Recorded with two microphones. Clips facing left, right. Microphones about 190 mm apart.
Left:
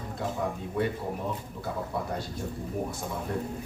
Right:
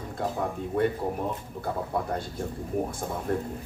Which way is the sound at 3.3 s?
55° right (ahead or behind).